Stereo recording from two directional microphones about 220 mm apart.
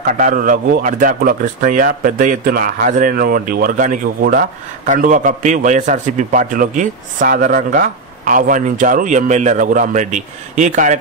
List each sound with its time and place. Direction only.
0.2 s speech: 40° right (ahead or behind)